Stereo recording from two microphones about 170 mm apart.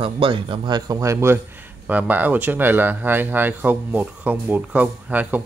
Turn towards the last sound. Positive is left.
turn(degrees=-10)  # may be behind; listen again after turning